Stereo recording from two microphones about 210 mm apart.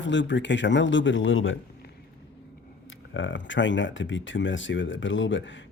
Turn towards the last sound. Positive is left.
turn(degrees=60)  # may be behind; listen again after turning